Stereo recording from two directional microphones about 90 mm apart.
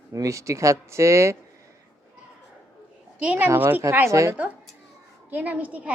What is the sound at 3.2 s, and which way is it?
Speech, 15° right (ahead or behind).